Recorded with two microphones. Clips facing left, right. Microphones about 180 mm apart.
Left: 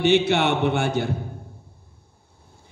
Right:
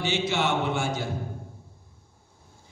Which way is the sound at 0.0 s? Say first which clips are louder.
Left 8 dB; 60° left (ahead or behind).